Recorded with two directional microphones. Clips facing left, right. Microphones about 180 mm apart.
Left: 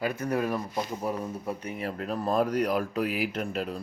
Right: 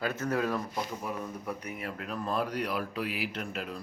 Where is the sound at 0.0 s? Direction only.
10° left (ahead or behind).